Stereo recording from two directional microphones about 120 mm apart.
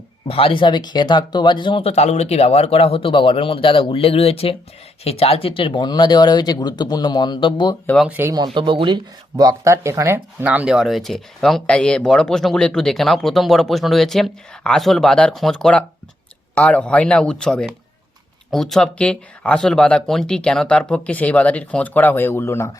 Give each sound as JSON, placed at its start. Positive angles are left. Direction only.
{"t": 0.3, "sound": "speech", "side_deg": 50}
{"t": 1.8, "sound": "speech", "side_deg": 60}
{"t": 8.0, "sound": "speech", "side_deg": -15}
{"t": 8.5, "sound": "speech", "side_deg": -40}
{"t": 9.4, "sound": "speech", "side_deg": -30}
{"t": 10.4, "sound": "speech", "side_deg": -10}